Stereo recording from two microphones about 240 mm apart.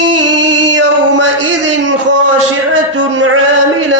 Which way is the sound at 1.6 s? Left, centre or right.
Right.